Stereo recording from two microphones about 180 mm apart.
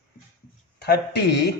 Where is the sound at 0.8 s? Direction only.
65° left (ahead or behind).